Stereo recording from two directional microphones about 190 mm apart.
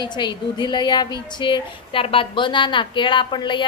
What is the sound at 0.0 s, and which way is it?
A woman's voice, 25° left (ahead or behind).